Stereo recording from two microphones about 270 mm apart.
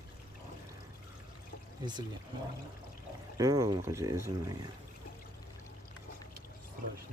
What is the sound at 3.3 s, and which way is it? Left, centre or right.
Speech, centre.